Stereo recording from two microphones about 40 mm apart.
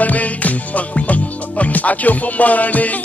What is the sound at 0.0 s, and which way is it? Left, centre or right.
Music, left.